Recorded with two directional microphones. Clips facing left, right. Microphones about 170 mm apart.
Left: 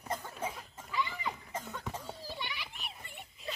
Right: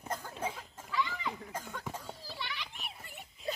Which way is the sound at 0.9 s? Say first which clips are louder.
Right 1 dB; 15° left (ahead or behind).